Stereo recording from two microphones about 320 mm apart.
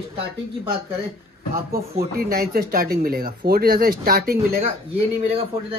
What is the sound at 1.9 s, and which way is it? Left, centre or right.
Speech, right.